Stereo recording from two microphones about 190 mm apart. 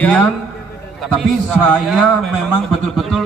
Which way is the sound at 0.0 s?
5° left (ahead or behind).